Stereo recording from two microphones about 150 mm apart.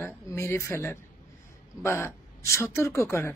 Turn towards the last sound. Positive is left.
turn(degrees=20)  # may be behind; listen again after turning